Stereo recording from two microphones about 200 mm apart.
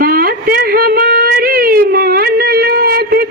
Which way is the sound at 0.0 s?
45° right (ahead or behind).